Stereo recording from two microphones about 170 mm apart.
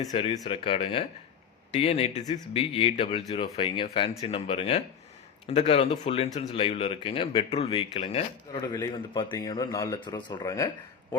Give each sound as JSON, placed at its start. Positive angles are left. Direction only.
{"t": 0.1, "sound": "speech", "side_deg": 35}
{"t": 8.7, "sound": "speech", "side_deg": 25}